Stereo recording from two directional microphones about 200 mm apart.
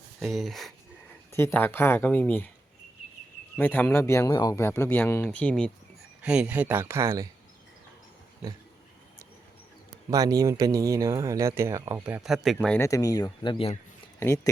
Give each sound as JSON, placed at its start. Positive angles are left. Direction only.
{"t": 0.2, "sound": "speech", "side_deg": 0}
{"t": 1.3, "sound": "speech", "side_deg": 10}
{"t": 3.6, "sound": "speech", "side_deg": 10}
{"t": 10.1, "sound": "speech", "side_deg": -15}
{"t": 12.5, "sound": "speech", "side_deg": 10}
{"t": 14.2, "sound": "speech", "side_deg": 15}